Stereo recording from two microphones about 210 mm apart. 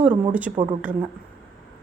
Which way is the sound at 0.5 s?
25° right (ahead or behind).